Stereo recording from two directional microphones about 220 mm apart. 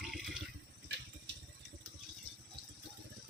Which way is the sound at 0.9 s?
50° right (ahead or behind).